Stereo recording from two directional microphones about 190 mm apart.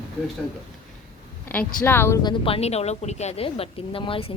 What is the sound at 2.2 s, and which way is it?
Speech, 25° left (ahead or behind).